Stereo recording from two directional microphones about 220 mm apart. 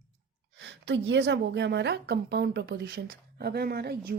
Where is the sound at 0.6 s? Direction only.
55° right (ahead or behind).